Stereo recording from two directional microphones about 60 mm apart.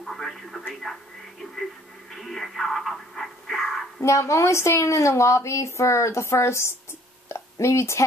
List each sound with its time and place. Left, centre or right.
0.0 s speech: centre
2.1 s radio: centre
4.0 s a woman's voice: left
7.3 s a sound: left
7.6 s a woman's voice: left